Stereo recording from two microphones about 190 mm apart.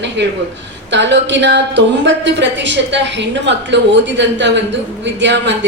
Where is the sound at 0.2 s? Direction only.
70° right (ahead or behind).